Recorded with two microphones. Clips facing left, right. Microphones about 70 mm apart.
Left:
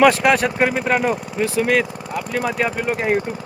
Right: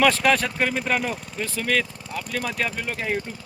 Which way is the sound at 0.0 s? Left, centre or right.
Centre.